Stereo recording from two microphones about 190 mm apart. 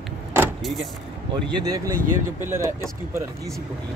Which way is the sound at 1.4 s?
20° right (ahead or behind).